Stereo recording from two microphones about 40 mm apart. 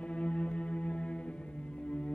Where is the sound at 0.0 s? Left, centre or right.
Left.